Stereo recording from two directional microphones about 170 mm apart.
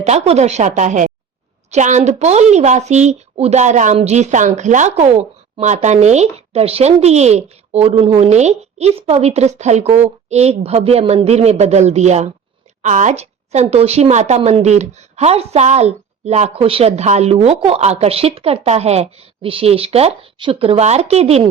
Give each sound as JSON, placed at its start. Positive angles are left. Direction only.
{"t": 0.0, "sound": "speech", "side_deg": -40}